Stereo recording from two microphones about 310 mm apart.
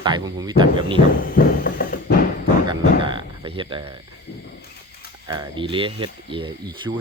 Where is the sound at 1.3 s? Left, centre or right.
Left.